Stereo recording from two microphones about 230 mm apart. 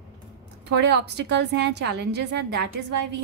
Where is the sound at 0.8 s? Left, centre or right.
Right.